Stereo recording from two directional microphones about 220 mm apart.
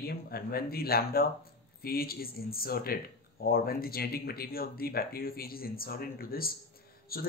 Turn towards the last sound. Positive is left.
turn(degrees=45)  # may be behind; listen again after turning